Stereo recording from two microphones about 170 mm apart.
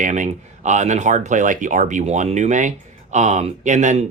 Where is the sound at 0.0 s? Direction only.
45° right (ahead or behind).